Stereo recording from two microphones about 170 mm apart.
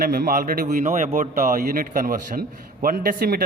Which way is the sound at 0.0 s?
60° right (ahead or behind).